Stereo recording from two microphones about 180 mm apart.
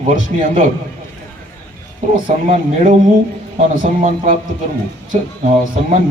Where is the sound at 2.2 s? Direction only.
45° right (ahead or behind).